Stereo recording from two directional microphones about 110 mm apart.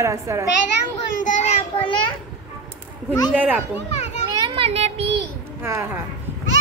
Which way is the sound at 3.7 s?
85° left.